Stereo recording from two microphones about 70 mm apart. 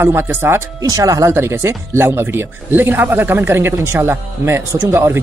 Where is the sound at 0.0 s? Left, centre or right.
Right.